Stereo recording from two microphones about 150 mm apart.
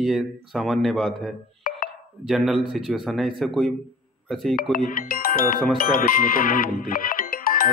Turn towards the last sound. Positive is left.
turn(degrees=75)  # may be behind; listen again after turning